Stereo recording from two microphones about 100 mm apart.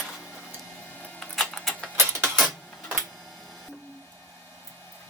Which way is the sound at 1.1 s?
5° left (ahead or behind).